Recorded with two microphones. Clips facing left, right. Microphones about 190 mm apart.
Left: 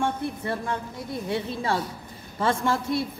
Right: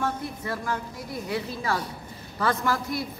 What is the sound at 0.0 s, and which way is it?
Speech, 30° left (ahead or behind).